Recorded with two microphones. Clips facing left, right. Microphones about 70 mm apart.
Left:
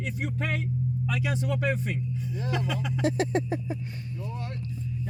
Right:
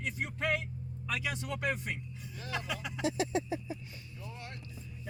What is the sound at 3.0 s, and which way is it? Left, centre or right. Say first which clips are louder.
Speech: left 5 dB; left.